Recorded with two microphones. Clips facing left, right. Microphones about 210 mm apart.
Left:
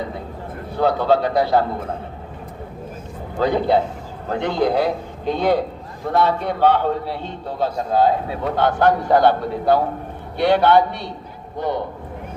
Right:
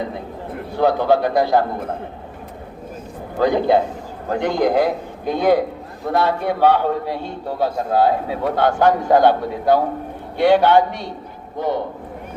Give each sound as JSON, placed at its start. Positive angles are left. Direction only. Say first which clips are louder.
{"t": 0.8, "sound": "a man's voice", "louder": "right 1 dB", "side_deg": -15}
{"t": 3.4, "sound": "a man's voice", "louder": "right 2 dB", "side_deg": -15}